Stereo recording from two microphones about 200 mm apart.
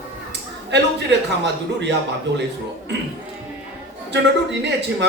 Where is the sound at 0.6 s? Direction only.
60° right (ahead or behind).